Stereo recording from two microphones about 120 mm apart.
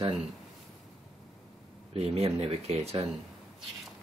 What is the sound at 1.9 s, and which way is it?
Speech, 55° right (ahead or behind).